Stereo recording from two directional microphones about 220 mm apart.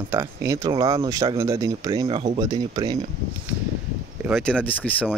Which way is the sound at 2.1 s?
30° right (ahead or behind).